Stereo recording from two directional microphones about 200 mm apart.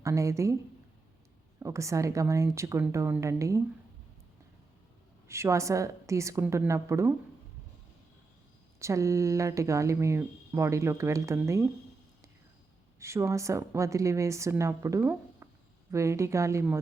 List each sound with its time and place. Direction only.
0.0 s speech: 15° right (ahead or behind)
1.5 s speech: 15° right (ahead or behind)
5.3 s speech: 15° right (ahead or behind)
8.8 s speech: 15° right (ahead or behind)
13.0 s speech: 15° right (ahead or behind)